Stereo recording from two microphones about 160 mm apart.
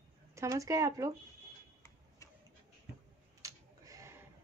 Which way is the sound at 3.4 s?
20° right (ahead or behind).